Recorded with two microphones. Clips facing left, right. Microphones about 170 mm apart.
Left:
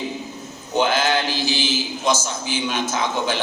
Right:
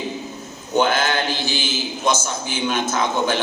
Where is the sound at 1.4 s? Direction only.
55° right (ahead or behind).